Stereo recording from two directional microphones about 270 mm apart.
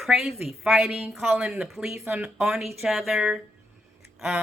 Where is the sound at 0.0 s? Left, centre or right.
Centre.